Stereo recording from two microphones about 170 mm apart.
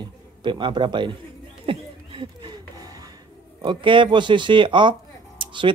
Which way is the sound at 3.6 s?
30° right (ahead or behind).